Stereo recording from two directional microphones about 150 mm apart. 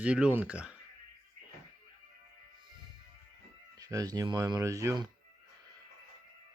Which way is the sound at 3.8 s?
25° right (ahead or behind).